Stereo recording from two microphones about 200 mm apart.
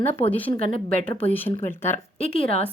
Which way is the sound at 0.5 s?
40° right (ahead or behind).